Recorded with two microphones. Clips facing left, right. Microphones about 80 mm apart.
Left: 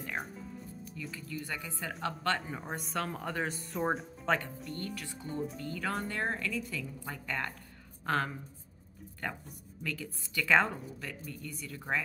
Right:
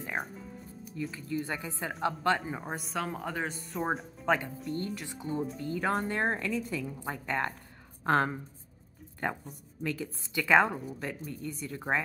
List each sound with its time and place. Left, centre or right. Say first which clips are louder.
0.2 s speech: right 4 dB; centre
1.1 s a woman's voice: right 4 dB; right; by 4.4 s centre
4.7 s a woman's voice: right 4 dB; right